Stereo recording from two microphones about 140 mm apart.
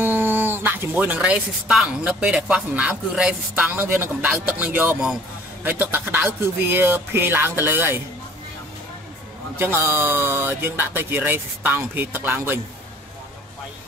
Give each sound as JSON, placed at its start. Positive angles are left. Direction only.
{"t": 0.0, "sound": "speech", "side_deg": -15}
{"t": 9.6, "sound": "speech", "side_deg": -15}